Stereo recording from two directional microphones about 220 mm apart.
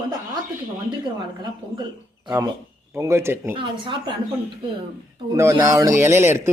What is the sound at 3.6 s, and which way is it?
Speech, 20° right (ahead or behind).